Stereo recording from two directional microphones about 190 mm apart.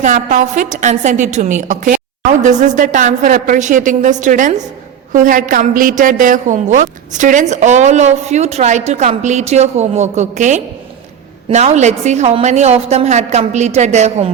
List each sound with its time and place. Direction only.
0.0 s a woman's voice: 40° right (ahead or behind)